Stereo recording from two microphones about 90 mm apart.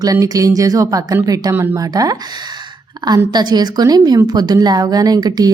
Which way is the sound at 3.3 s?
50° right (ahead or behind).